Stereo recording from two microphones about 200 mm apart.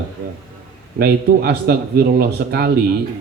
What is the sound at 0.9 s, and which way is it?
Speech, 50° right (ahead or behind).